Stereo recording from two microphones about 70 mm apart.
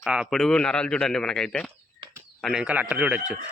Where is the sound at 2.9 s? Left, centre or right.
Right.